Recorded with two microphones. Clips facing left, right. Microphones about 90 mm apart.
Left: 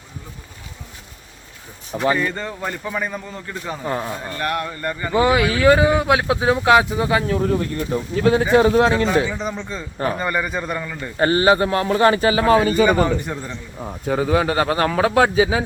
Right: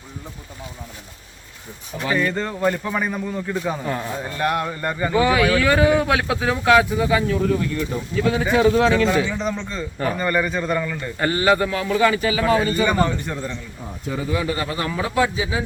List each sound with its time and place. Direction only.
2.1 s a man's voice: 5° left (ahead or behind); by 5.1 s 15° right (ahead or behind)
5.2 s speech: 20° left (ahead or behind)
5.8 s speech: 20° left (ahead or behind)
6.9 s speech: 40° left (ahead or behind)
9.2 s speech: 5° left (ahead or behind)
11.2 s speech: 35° left (ahead or behind)
11.6 s speech: 45° left (ahead or behind)
14.1 s speech: 65° left (ahead or behind)